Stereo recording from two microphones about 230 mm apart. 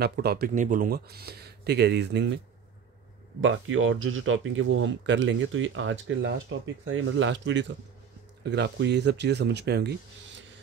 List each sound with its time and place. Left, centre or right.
0.0 s speech: right